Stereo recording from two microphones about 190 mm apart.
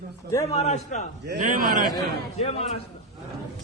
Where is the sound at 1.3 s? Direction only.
45° right (ahead or behind).